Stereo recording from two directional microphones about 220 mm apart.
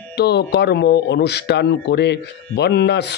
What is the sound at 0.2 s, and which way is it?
A man's voice, 45° left (ahead or behind).